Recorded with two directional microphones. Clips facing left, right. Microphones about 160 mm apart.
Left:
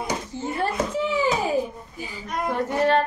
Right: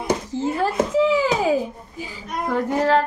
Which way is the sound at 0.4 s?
90° right.